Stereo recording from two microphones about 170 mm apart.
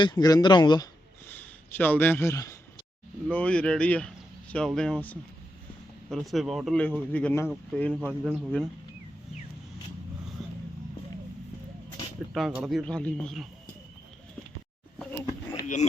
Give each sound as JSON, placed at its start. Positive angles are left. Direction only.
{"t": 0.0, "sound": "speech", "side_deg": 25}
{"t": 1.3, "sound": "speech", "side_deg": 10}
{"t": 7.9, "sound": "speech", "side_deg": -5}
{"t": 10.4, "sound": "a sound", "side_deg": 0}
{"t": 12.3, "sound": "speech", "side_deg": -5}
{"t": 15.6, "sound": "speech", "side_deg": 45}